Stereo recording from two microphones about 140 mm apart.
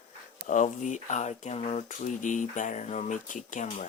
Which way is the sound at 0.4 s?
65° left (ahead or behind).